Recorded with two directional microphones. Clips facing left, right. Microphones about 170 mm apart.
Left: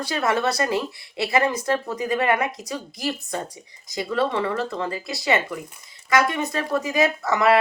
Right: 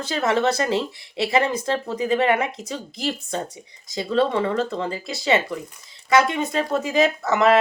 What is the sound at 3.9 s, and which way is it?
Speech, 20° right (ahead or behind).